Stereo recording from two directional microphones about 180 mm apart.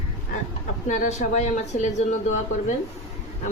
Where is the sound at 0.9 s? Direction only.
40° left (ahead or behind).